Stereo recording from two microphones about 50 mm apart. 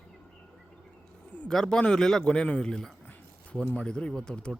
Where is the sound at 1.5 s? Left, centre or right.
Centre.